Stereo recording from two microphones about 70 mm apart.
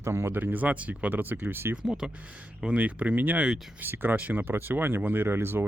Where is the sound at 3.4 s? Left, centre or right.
Centre.